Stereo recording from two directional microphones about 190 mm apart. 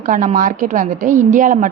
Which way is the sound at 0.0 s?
40° right (ahead or behind).